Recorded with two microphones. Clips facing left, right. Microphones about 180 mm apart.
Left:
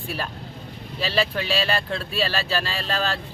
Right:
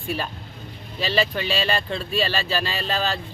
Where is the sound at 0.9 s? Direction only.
5° left (ahead or behind).